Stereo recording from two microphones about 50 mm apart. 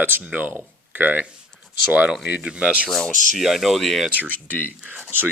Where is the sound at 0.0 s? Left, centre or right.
Right.